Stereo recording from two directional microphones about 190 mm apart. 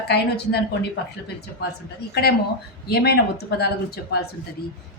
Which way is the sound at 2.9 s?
55° left (ahead or behind).